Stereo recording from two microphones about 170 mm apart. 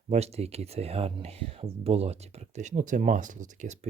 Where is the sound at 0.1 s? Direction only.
40° right (ahead or behind).